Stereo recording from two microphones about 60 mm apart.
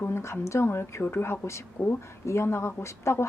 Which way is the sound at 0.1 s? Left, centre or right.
Left.